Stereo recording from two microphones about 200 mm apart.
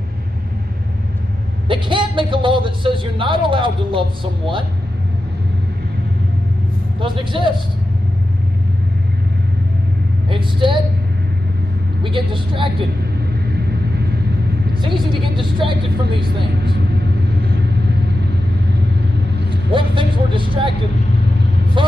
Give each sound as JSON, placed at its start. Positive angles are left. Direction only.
{"t": 1.7, "sound": "a man's voice", "side_deg": -25}
{"t": 7.0, "sound": "a man's voice", "side_deg": -25}
{"t": 10.3, "sound": "a man's voice", "side_deg": -25}
{"t": 12.0, "sound": "a man's voice", "side_deg": -25}
{"t": 15.3, "sound": "a man's voice", "side_deg": -25}
{"t": 19.7, "sound": "a man's voice", "side_deg": -25}
{"t": 21.8, "sound": "speech", "side_deg": -25}